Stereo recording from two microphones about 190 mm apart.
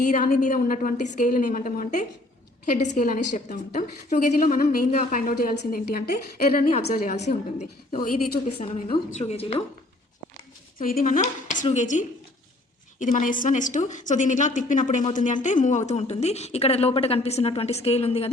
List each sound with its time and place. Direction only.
0.0 s a woman's voice: 40° left (ahead or behind)
6.7 s a woman's voice: 35° left (ahead or behind)
6.9 s a woman's voice: 45° left (ahead or behind)
10.8 s a woman's voice: 45° left (ahead or behind)